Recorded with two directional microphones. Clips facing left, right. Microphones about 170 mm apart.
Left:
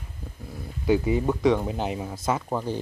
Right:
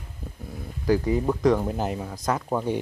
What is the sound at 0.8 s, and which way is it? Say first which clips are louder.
Speech: even; 5° left (ahead or behind).